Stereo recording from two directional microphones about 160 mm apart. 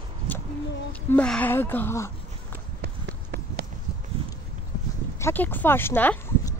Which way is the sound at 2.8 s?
90° right.